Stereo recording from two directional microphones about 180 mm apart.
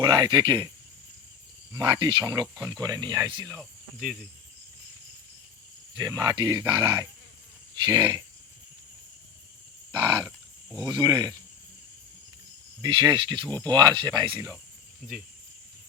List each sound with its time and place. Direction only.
0.0 s speech: 25° right (ahead or behind)
1.7 s speech: 20° right (ahead or behind)
5.9 s speech: 20° right (ahead or behind)
10.0 s wild animals: 20° right (ahead or behind)
10.8 s speech: 25° right (ahead or behind)
12.8 s speech: 25° right (ahead or behind)
14.3 s wild animals: 15° right (ahead or behind)